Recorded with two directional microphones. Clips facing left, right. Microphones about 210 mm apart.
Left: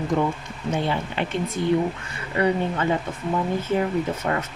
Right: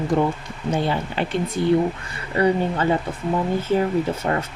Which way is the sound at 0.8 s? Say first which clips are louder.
Right 2 dB; 35° right (ahead or behind).